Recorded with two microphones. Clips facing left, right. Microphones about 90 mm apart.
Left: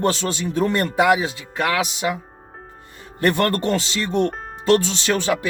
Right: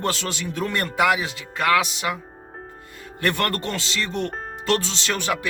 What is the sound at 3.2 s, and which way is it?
Speech, 25° left (ahead or behind).